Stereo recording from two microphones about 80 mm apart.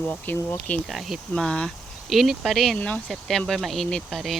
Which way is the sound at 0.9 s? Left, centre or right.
Centre.